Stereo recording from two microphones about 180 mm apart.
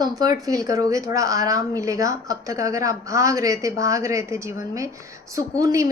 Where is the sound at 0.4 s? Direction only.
20° right (ahead or behind).